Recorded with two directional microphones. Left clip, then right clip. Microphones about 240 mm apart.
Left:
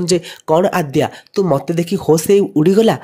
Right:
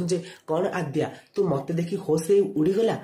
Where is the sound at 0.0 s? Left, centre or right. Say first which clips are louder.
Left 11 dB; left.